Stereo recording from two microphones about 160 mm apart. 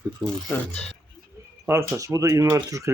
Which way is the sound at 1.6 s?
15° right (ahead or behind).